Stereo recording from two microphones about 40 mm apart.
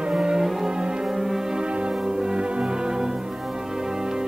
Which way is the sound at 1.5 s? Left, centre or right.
Right.